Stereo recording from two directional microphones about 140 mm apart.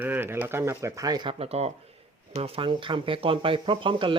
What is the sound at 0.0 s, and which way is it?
Speech, 15° right (ahead or behind).